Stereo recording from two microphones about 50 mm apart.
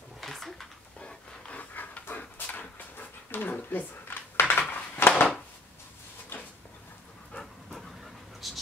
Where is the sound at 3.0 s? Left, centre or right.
Left.